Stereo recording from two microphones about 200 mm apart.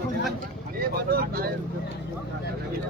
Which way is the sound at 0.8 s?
50° right (ahead or behind).